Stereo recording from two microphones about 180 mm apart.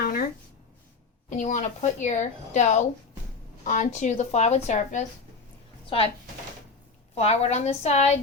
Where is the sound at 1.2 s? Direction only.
45° left (ahead or behind).